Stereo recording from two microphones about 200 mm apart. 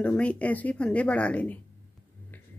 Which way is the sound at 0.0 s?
5° left (ahead or behind).